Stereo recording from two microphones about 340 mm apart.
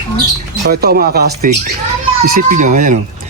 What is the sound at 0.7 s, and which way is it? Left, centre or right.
Speech, right.